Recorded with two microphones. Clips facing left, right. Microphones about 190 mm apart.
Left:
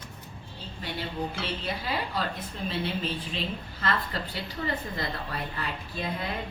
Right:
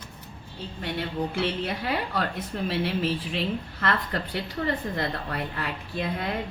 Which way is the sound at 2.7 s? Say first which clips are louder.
Right 4 dB; 80° right.